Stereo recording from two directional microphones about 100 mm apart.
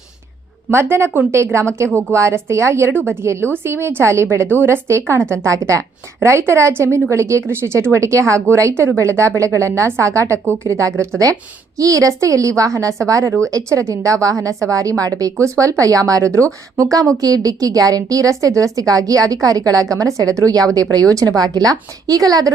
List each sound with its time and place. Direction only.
0.7 s a woman's voice: 25° right (ahead or behind)